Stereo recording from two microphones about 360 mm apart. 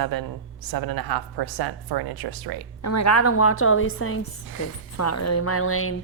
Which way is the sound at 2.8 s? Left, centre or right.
Left.